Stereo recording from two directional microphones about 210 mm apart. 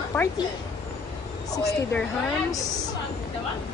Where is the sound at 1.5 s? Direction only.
15° left (ahead or behind).